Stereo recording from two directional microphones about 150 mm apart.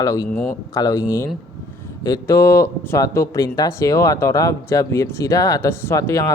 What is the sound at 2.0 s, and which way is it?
A man's voice, 20° left (ahead or behind).